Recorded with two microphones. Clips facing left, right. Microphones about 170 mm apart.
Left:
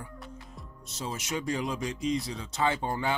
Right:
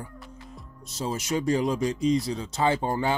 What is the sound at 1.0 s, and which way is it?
Speech, 35° right (ahead or behind).